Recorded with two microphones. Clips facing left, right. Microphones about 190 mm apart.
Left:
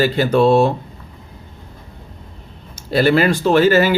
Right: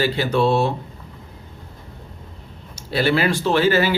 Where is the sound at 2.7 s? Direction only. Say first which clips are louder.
Left 5 dB; 45° left (ahead or behind).